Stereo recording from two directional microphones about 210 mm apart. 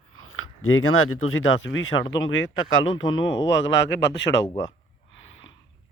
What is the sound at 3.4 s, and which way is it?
Speech, 60° left (ahead or behind).